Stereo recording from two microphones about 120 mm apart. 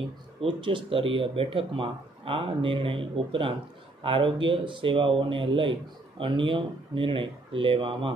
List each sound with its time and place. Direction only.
0.4 s speech: 45° right (ahead or behind)